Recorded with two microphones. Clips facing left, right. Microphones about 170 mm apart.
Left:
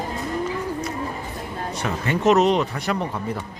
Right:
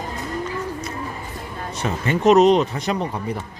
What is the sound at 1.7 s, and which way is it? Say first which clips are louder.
Speech: right 3 dB; 20° right (ahead or behind).